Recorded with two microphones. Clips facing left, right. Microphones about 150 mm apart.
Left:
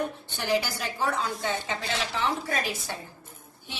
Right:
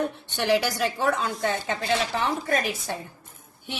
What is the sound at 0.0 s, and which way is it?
A woman's voice, 70° right (ahead or behind).